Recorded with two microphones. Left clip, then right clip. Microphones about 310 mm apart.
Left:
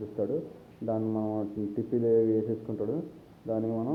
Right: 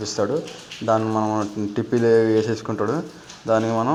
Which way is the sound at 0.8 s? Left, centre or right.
Right.